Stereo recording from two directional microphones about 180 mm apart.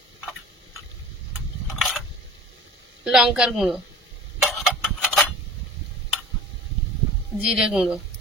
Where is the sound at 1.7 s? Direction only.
Centre (ahead or behind).